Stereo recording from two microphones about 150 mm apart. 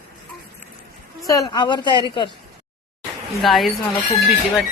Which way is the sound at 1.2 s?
25° left (ahead or behind).